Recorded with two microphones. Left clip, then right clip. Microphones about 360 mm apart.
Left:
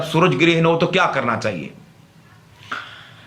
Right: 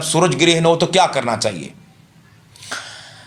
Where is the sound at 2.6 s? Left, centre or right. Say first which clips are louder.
Right 1 dB; centre.